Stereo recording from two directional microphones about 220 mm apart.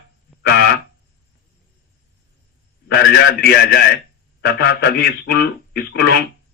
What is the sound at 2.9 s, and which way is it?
A man's voice, 45° left (ahead or behind).